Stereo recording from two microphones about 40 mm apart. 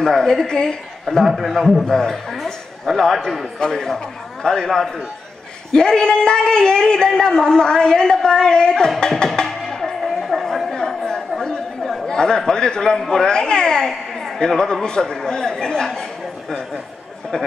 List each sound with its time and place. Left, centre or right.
0.0 s speech: centre
1.0 s speech: centre
2.3 s a woman's voice: centre
3.5 s speech: centre
5.7 s a man's voice: centre
9.2 s music: centre
10.0 s a sound: centre
10.4 s chatter: centre
10.7 s chatter: centre
11.8 s chatter: centre
12.1 s a man's voice: centre